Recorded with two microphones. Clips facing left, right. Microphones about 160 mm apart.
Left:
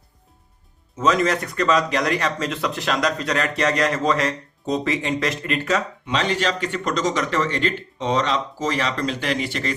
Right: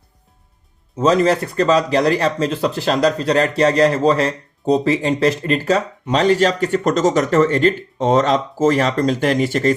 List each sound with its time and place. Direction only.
0.9 s speech: 30° right (ahead or behind)